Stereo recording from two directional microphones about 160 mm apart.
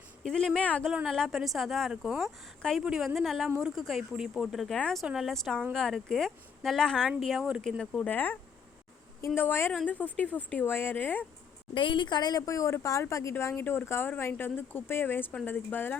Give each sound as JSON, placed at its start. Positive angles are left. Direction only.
{"t": 0.2, "sound": "a woman's voice", "side_deg": 5}
{"t": 11.7, "sound": "a woman's voice", "side_deg": 30}